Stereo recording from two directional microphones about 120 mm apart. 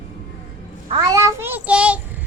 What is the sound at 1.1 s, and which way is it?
Child singing, 25° right (ahead or behind).